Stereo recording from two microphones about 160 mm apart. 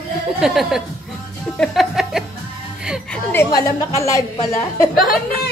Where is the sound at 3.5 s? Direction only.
20° left (ahead or behind).